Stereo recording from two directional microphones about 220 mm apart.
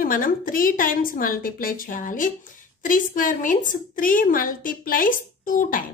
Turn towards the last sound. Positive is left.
turn(degrees=40)  # may be behind; listen again after turning